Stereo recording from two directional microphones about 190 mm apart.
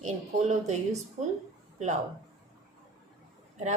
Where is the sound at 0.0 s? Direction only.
35° right (ahead or behind).